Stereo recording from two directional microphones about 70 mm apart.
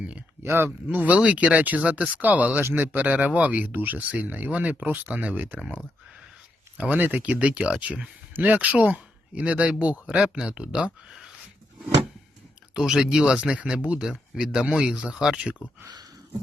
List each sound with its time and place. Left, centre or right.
0.4 s speech: right
6.7 s speech: centre
12.7 s speech: centre